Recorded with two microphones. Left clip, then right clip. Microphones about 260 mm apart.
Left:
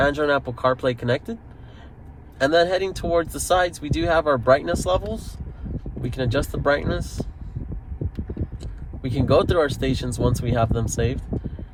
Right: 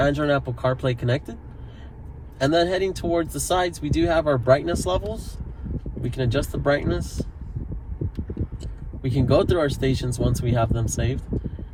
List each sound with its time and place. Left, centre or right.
0.0 s speech: left
2.4 s speech: left